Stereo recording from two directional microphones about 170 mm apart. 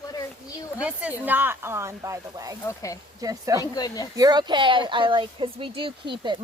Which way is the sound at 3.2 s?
20° right (ahead or behind).